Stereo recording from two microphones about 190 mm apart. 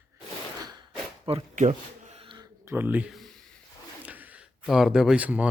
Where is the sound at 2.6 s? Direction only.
10° right (ahead or behind).